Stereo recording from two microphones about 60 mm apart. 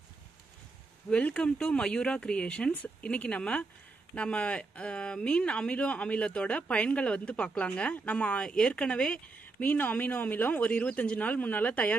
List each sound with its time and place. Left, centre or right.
1.1 s speech: centre
9.3 s speech: left